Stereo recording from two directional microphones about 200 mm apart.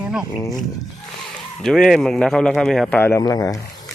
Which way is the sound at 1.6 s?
Centre (ahead or behind).